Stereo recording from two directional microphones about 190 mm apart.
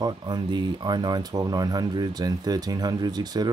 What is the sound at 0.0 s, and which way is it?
Speech, 25° right (ahead or behind).